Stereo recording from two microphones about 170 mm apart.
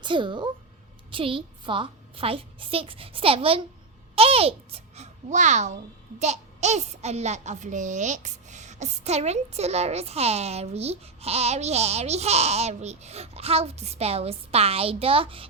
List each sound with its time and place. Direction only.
0.0 s a child's voice: 30° right (ahead or behind)